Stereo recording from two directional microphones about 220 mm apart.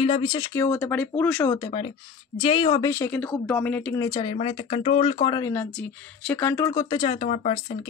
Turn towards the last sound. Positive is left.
turn(degrees=30)  # may be behind; listen again after turning